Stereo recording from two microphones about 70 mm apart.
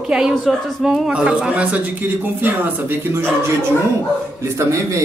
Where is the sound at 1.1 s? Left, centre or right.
Centre; by 3.2 s right.